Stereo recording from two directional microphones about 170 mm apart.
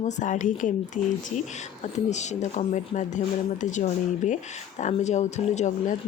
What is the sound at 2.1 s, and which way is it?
Speech, 45° left (ahead or behind).